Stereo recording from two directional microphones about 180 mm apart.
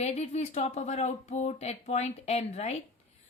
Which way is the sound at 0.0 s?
40° left (ahead or behind).